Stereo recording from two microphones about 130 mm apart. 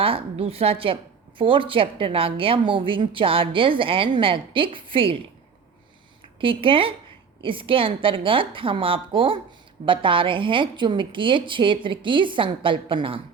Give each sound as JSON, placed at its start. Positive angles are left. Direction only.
{"t": 0.0, "sound": "a woman's voice", "side_deg": -45}
{"t": 6.4, "sound": "a woman's voice", "side_deg": -40}